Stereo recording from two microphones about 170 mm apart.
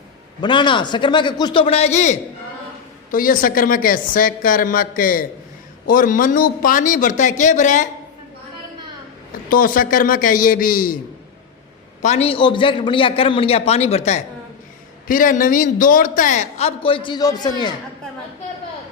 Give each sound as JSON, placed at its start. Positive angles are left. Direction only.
{"t": 0.4, "sound": "a man's voice", "side_deg": 30}
{"t": 3.1, "sound": "a woman's voice", "side_deg": 55}
{"t": 9.5, "sound": "a woman's voice", "side_deg": 55}
{"t": 12.0, "sound": "a man's voice", "side_deg": 35}
{"t": 15.0, "sound": "speech", "side_deg": 50}